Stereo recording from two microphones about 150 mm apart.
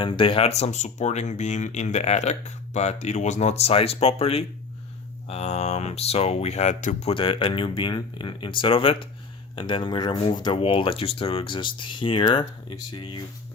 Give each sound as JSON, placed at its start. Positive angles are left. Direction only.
{"t": 0.0, "sound": "speech", "side_deg": 35}
{"t": 7.1, "sound": "speech", "side_deg": 35}